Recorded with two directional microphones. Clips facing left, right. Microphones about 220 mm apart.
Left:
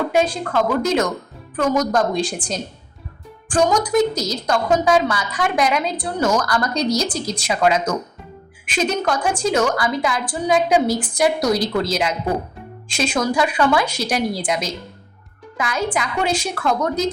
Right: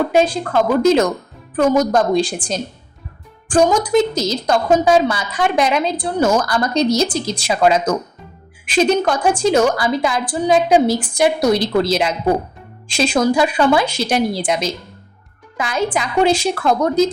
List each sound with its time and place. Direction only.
0.1 s a woman's voice: 30° right (ahead or behind)